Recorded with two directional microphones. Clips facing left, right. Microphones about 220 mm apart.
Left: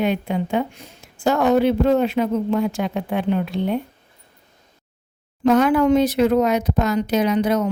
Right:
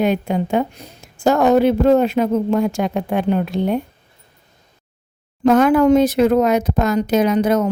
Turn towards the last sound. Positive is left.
turn(degrees=-45)  # may be behind; listen again after turning